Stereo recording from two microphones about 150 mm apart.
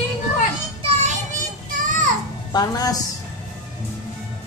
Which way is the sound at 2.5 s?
25° left (ahead or behind).